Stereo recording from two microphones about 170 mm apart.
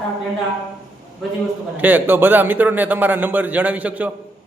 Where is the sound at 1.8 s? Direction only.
10° right (ahead or behind).